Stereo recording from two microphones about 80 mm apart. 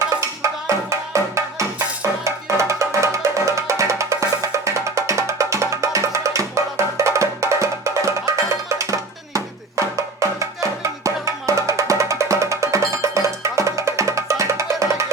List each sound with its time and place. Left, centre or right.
0.2 s music: right